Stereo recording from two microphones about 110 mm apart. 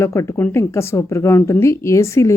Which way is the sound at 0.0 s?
25° left (ahead or behind).